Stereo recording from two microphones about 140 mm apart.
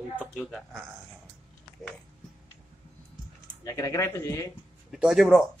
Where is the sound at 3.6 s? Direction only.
25° left (ahead or behind).